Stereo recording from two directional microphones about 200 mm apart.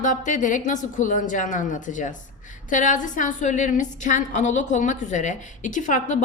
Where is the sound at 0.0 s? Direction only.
40° left (ahead or behind).